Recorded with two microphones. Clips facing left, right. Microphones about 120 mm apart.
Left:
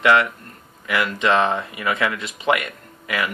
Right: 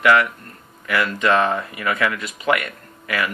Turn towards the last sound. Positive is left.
turn(degrees=20)  # may be behind; listen again after turning